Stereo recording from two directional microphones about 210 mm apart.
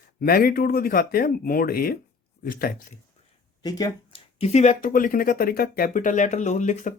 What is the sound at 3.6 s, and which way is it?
Speech, 20° left (ahead or behind).